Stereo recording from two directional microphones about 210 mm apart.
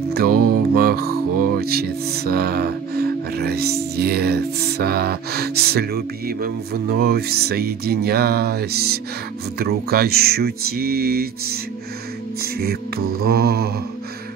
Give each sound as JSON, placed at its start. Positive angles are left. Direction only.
{"t": 0.1, "sound": "mantra", "side_deg": -45}
{"t": 3.9, "sound": "music", "side_deg": -50}